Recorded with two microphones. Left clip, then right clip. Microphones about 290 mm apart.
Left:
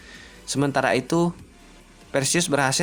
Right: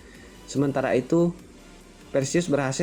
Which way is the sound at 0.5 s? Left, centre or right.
Centre.